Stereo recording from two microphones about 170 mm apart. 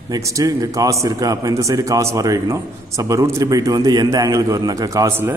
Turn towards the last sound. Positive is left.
turn(degrees=-20)  # may be behind; listen again after turning